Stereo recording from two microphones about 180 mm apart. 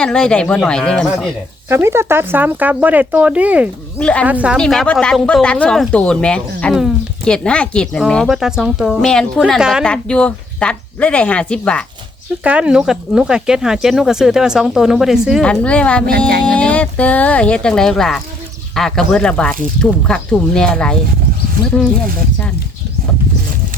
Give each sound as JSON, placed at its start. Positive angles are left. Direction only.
{"t": 0.0, "sound": "speech", "side_deg": 5}
{"t": 1.7, "sound": "speech", "side_deg": -15}
{"t": 4.0, "sound": "speech", "side_deg": 5}
{"t": 4.3, "sound": "speech", "side_deg": -10}
{"t": 4.5, "sound": "speech", "side_deg": 5}
{"t": 12.4, "sound": "speech", "side_deg": -5}